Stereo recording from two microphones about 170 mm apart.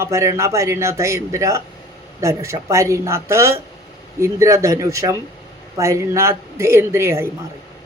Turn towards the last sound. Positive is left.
turn(degrees=-15)  # may be behind; listen again after turning